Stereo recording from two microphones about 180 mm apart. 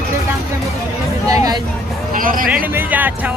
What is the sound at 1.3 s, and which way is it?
Speech, 20° right (ahead or behind).